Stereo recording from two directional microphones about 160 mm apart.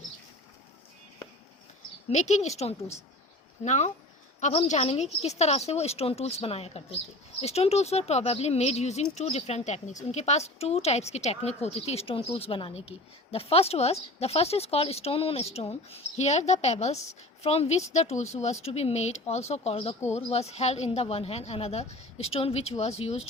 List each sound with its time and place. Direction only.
2.0 s a woman's voice: 45° left (ahead or behind)